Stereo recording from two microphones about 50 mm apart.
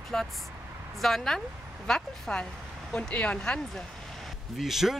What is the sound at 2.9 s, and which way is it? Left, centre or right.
Speech, left.